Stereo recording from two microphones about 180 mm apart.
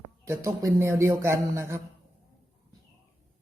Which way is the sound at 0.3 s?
15° right (ahead or behind).